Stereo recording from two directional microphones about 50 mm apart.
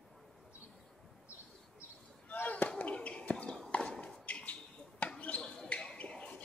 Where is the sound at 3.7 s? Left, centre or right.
Left.